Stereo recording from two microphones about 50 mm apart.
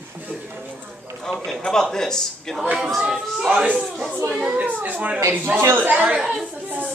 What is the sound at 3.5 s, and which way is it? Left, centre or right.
A child's voice, right.